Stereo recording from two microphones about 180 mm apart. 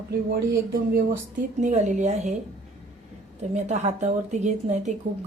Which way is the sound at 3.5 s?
40° right (ahead or behind).